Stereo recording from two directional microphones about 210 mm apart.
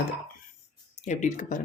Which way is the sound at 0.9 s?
35° left (ahead or behind).